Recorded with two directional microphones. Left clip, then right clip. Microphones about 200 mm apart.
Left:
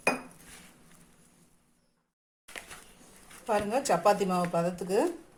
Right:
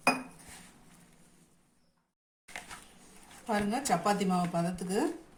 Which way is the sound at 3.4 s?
25° left (ahead or behind).